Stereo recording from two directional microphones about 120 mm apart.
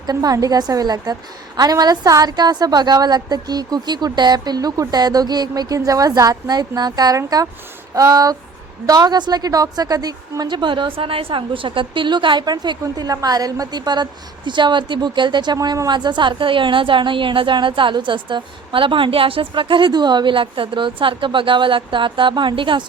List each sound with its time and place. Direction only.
0.0 s a woman's voice: 30° right (ahead or behind)